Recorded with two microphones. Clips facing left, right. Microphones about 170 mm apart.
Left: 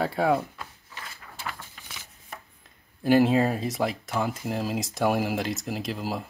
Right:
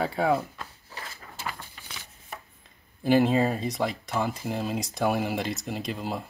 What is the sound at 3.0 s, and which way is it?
Speech, centre (ahead or behind).